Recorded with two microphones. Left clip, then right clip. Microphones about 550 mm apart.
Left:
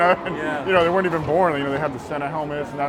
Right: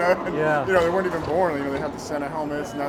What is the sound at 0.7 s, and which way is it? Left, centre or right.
Speech, left.